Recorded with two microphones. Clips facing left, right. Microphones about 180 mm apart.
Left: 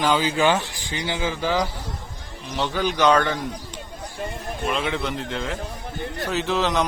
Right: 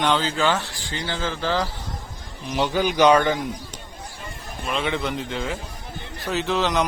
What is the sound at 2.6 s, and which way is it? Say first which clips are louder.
Speech: right 3 dB; 10° right (ahead or behind).